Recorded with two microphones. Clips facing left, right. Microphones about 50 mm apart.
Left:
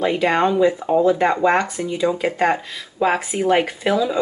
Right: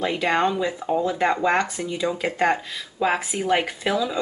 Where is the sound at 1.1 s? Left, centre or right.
Centre.